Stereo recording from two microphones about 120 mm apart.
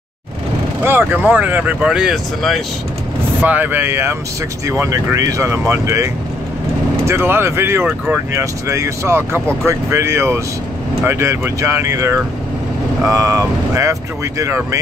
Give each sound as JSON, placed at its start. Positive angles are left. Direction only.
{"t": 0.8, "sound": "speech", "side_deg": -15}
{"t": 3.4, "sound": "speech", "side_deg": -15}
{"t": 7.1, "sound": "speech", "side_deg": -20}